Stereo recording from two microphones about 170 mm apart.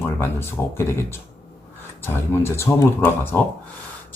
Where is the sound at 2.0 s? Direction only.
15° left (ahead or behind).